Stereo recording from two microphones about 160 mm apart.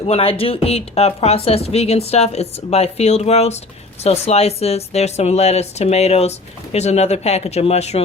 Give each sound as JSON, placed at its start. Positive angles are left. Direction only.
{"t": 0.0, "sound": "a woman's voice", "side_deg": 35}